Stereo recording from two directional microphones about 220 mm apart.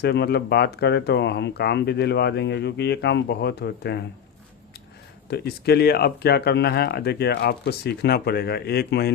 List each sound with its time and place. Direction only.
0.0 s speech: 45° left (ahead or behind)
5.3 s speech: 45° left (ahead or behind)